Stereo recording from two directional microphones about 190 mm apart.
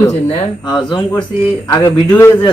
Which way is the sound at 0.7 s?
25° left (ahead or behind).